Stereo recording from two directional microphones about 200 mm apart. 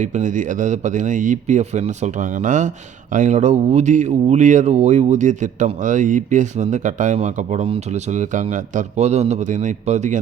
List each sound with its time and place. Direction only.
0.0 s a man's voice: 40° right (ahead or behind)